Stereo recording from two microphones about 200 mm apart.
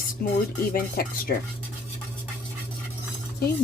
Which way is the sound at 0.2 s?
45° left (ahead or behind).